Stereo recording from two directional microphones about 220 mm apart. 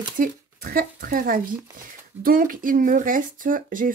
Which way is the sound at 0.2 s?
40° right (ahead or behind).